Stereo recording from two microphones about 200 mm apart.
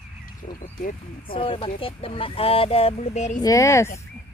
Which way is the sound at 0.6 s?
45° left (ahead or behind).